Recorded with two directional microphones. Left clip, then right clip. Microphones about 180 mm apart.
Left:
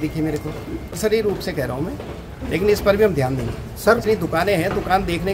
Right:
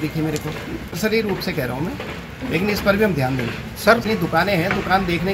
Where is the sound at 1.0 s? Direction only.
30° left (ahead or behind).